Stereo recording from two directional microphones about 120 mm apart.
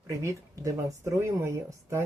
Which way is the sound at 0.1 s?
25° right (ahead or behind).